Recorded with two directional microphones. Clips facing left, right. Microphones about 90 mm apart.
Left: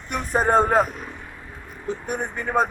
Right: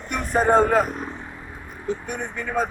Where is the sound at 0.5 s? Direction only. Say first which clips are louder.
Right 1 dB; 35° left (ahead or behind).